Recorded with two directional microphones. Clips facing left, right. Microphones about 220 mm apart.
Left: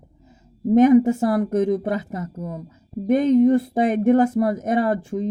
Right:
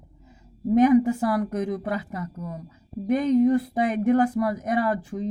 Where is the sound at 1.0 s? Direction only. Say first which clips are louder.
Left 4 dB; 25° left (ahead or behind).